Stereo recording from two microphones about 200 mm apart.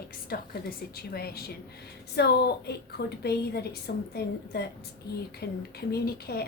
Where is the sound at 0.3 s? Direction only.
50° left (ahead or behind).